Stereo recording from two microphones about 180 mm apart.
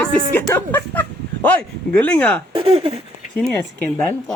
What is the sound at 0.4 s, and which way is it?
Speech, 15° left (ahead or behind).